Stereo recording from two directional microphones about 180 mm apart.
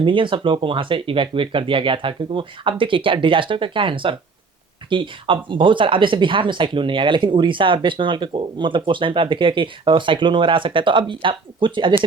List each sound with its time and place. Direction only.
0.0 s speech: 30° right (ahead or behind)